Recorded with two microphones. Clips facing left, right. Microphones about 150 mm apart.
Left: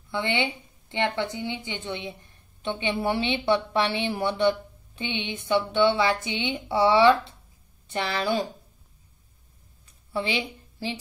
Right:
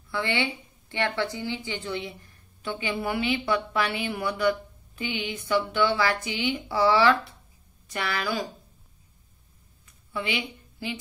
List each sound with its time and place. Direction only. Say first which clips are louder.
0.1 s speech: left 1 dB; 20° left (ahead or behind)
10.1 s a woman's voice: left 3 dB; 35° left (ahead or behind)